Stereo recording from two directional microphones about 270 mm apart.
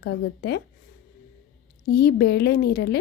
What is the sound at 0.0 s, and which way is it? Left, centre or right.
Speech, left.